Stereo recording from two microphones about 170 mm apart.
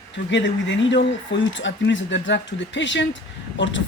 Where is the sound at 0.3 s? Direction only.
90° left.